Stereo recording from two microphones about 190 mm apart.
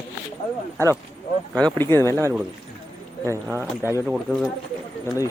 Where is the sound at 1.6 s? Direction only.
5° left (ahead or behind).